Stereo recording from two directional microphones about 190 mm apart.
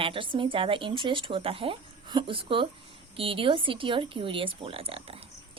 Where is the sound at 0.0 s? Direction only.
25° right (ahead or behind).